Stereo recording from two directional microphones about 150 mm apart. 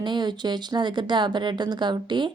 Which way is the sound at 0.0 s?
30° right (ahead or behind).